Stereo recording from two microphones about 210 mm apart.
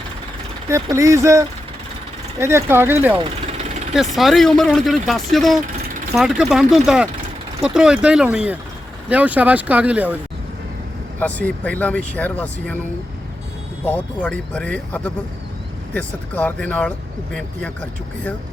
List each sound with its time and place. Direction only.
0.7 s speech: 15° right (ahead or behind)
3.2 s vehicle: 30° right (ahead or behind)
3.9 s speech: centre (ahead or behind)
11.2 s speech: 5° left (ahead or behind)
13.8 s speech: 5° left (ahead or behind)